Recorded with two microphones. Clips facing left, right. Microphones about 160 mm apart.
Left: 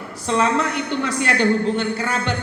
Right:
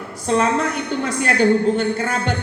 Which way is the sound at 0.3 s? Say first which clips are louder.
Right 1 dB; 45° right (ahead or behind).